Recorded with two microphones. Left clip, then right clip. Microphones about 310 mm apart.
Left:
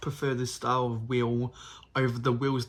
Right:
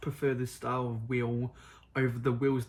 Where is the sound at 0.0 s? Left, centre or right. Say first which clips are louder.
Left 1 dB; left.